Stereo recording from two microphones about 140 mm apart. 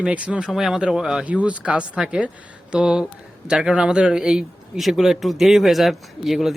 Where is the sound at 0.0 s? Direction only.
10° right (ahead or behind).